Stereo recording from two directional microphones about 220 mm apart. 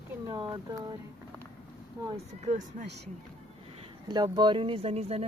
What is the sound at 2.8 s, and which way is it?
Speech, 50° right (ahead or behind).